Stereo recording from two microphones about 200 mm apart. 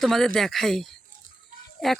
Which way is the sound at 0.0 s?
Centre (ahead or behind).